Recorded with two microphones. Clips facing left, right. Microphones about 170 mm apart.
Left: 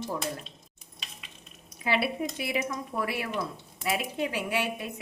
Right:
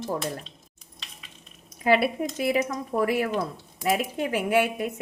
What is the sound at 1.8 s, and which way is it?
Speech, 45° right (ahead or behind).